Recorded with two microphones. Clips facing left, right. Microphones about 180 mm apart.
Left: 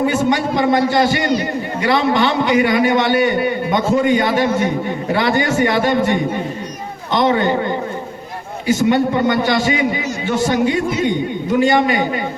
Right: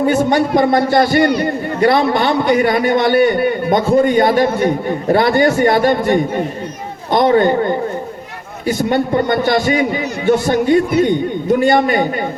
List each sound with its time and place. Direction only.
0.3 s a man's voice: 55° right (ahead or behind)